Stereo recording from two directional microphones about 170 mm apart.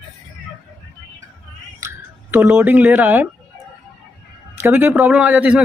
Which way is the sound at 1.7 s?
15° right (ahead or behind).